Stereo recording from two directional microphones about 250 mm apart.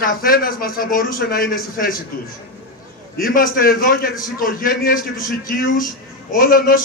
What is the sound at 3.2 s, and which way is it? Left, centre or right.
Speech, left.